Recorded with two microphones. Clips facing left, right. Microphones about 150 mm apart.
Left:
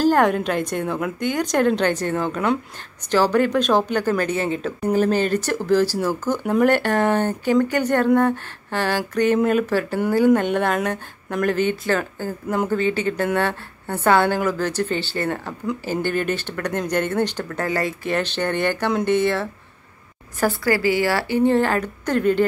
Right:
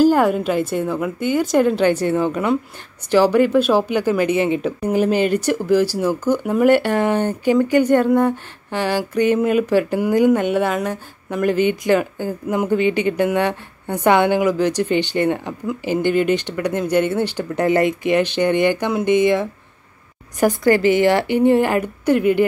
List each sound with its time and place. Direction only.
0.0 s speech: 10° right (ahead or behind)